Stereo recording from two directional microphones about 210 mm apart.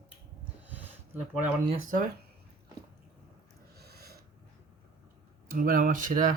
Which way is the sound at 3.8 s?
50° right (ahead or behind).